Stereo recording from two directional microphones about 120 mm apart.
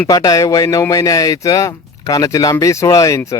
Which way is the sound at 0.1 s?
30° left (ahead or behind).